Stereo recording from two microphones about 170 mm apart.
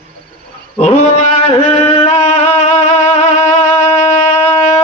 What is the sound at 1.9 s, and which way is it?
Music, 35° left (ahead or behind).